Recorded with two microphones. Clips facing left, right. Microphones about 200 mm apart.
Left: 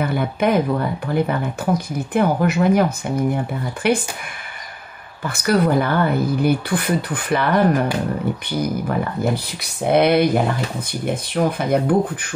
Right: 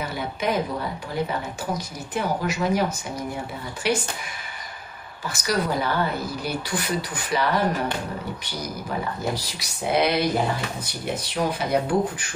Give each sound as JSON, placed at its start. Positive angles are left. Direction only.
{"t": 0.0, "sound": "speech", "side_deg": 55}
{"t": 5.2, "sound": "speech", "side_deg": 55}
{"t": 11.3, "sound": "speech", "side_deg": 55}